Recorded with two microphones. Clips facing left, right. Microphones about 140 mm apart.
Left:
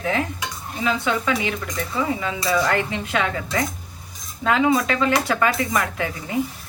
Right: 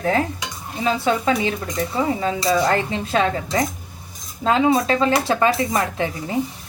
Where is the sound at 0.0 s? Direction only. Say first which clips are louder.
Right 3 dB; 40° right (ahead or behind).